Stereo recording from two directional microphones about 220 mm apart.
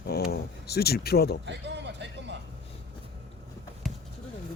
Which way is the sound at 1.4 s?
50° right (ahead or behind).